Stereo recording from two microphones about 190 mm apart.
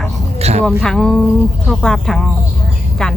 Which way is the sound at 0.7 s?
Centre (ahead or behind).